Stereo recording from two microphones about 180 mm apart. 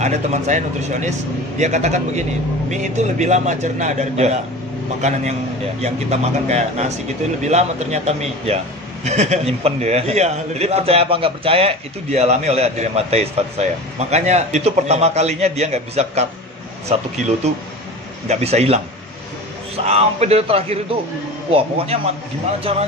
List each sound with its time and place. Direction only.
0.0 s a man's voice: 40° right (ahead or behind)
5.8 s a man's voice: 35° right (ahead or behind)
18.3 s a man's voice: 35° right (ahead or behind)
19.8 s a man's voice: 35° right (ahead or behind)